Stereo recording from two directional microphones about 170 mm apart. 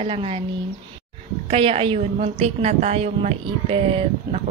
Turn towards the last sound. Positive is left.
turn(degrees=-35)  # may be behind; listen again after turning